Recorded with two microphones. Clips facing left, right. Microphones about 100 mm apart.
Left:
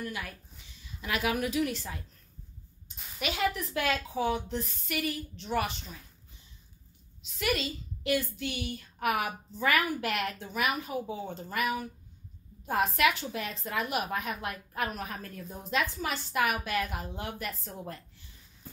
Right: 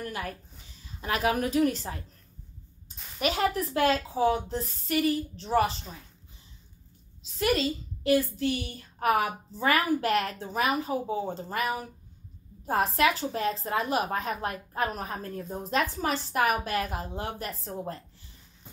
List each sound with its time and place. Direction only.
0.0 s a woman's voice: 40° right (ahead or behind)
3.2 s a woman's voice: 40° right (ahead or behind)
7.3 s a woman's voice: 35° right (ahead or behind)